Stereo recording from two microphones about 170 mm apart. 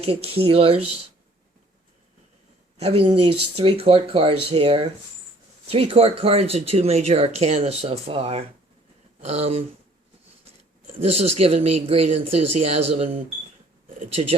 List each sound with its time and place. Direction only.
0.0 s speech: 35° right (ahead or behind)
2.7 s speech: 35° right (ahead or behind)
10.9 s speech: 35° right (ahead or behind)